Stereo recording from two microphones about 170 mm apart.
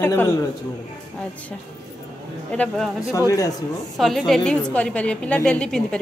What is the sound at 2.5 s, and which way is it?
Speech, 5° left (ahead or behind).